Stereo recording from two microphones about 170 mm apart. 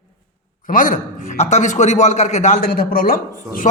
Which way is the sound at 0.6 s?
50° left (ahead or behind).